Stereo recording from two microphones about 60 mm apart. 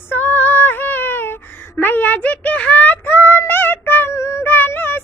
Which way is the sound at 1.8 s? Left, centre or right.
Left.